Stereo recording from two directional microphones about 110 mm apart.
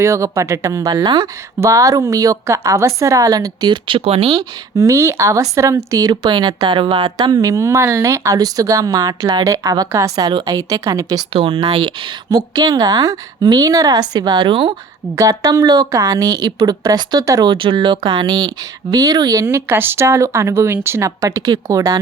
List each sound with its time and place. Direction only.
0.0 s speech: 25° right (ahead or behind); by 1.3 s 40° right (ahead or behind)
1.6 s speech: 30° right (ahead or behind); by 4.4 s 65° right (ahead or behind)
4.4 s speech: 30° right (ahead or behind)
11.3 s speech: 55° right (ahead or behind)
11.7 s speech: 45° right (ahead or behind)
15.1 s speech: 30° right (ahead or behind)
17.5 s speech: 45° right (ahead or behind); by 21.1 s 20° right (ahead or behind)
21.2 s speech: 35° right (ahead or behind)